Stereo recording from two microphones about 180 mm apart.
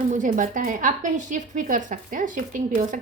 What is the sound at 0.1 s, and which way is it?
A woman's voice, 45° right (ahead or behind).